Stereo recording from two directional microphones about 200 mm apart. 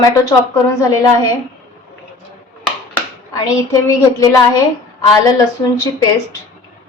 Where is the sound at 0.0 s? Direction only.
15° left (ahead or behind).